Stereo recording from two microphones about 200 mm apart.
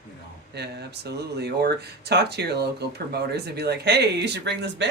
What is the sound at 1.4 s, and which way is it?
Speech, 55° right (ahead or behind).